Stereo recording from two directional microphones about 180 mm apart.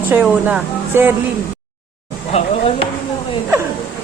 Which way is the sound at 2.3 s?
35° left (ahead or behind).